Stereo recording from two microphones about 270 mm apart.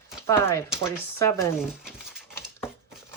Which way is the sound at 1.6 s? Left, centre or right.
Centre.